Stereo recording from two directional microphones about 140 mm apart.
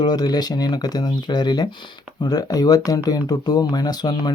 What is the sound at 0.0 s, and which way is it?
Speech, 30° left (ahead or behind).